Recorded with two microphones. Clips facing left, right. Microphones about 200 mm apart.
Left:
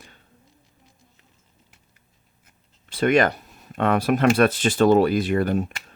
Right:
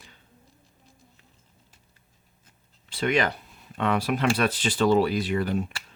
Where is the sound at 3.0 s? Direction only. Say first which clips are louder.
Left 6 dB; 50° left (ahead or behind).